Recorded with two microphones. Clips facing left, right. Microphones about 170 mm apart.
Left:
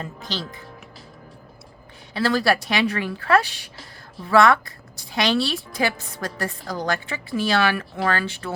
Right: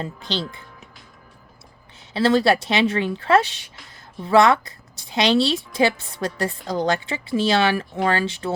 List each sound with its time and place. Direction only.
0.0 s a woman's voice: 30° right (ahead or behind)
2.1 s a woman's voice: 25° right (ahead or behind)